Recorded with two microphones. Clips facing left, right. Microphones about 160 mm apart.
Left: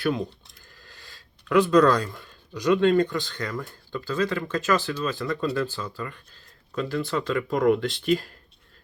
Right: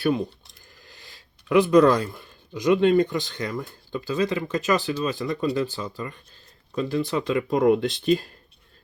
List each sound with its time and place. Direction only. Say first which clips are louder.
0.8 s speech: right 1 dB; 15° right (ahead or behind)